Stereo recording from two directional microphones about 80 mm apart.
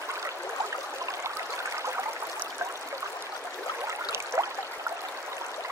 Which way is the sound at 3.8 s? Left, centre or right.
Right.